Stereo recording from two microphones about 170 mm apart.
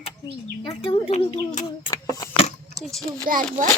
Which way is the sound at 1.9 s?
20° left (ahead or behind).